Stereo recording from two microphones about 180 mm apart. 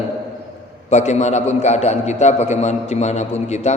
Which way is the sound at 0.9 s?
40° left (ahead or behind).